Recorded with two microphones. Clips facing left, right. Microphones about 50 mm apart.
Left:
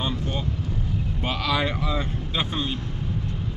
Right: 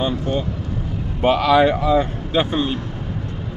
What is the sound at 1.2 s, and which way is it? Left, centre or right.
Speech, right.